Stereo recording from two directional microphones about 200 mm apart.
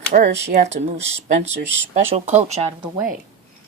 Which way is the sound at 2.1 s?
35° right (ahead or behind).